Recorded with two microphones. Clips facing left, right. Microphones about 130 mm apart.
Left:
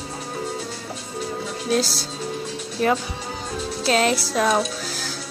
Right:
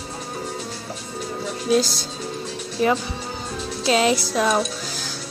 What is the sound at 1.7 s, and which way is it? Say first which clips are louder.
Speech: right 3 dB; 5° left (ahead or behind).